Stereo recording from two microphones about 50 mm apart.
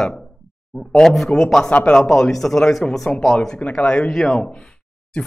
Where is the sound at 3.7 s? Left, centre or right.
Left.